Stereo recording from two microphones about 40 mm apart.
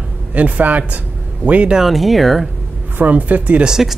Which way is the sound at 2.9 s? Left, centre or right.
Right.